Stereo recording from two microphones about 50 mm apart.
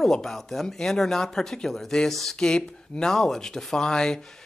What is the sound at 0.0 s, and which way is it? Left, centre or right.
Speech, centre.